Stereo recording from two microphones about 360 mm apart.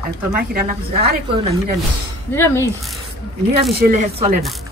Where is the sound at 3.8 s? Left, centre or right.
Right.